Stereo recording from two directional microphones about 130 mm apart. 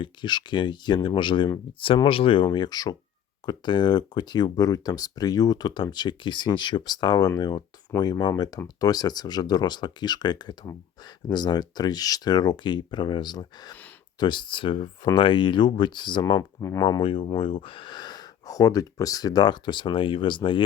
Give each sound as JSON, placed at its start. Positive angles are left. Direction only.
{"t": 0.0, "sound": "speech", "side_deg": 35}
{"t": 16.8, "sound": "speech", "side_deg": 40}